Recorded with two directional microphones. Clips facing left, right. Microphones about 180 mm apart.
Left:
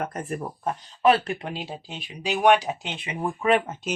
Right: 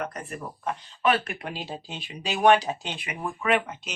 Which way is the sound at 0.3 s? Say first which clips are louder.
Left 4 dB; 40° left (ahead or behind).